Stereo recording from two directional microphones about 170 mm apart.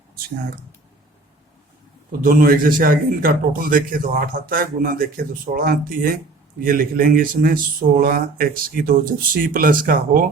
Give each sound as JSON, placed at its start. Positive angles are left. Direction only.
{"t": 2.2, "sound": "a man's voice", "side_deg": -55}